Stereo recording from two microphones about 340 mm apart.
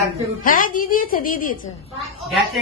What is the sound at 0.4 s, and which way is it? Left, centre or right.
A woman's voice, left.